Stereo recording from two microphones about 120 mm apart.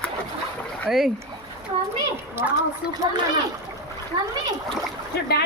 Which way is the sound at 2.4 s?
20° right (ahead or behind).